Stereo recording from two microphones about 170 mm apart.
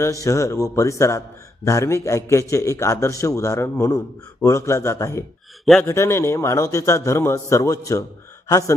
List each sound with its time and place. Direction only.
0.0 s a man's voice: 20° left (ahead or behind)